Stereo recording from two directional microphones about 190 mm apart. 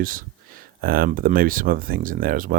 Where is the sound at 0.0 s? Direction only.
45° right (ahead or behind).